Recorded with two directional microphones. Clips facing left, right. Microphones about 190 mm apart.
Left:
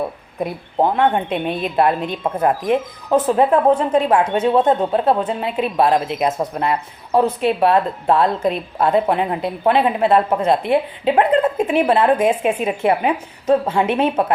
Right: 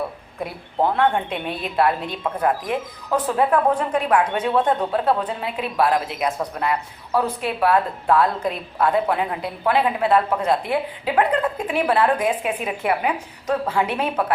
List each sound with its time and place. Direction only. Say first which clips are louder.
0.8 s a woman's voice: left 3 dB; 20° left (ahead or behind)